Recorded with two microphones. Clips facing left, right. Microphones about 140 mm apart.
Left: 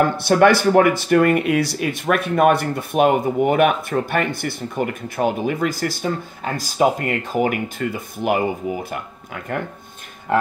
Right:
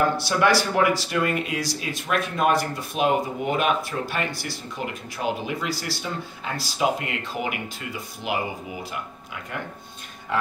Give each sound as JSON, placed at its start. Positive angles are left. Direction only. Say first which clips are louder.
{"t": 0.2, "sound": "speech", "louder": "left 7 dB", "side_deg": 55}